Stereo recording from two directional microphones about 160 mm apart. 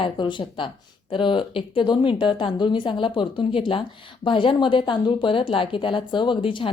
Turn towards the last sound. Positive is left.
turn(degrees=30)  # may be behind; listen again after turning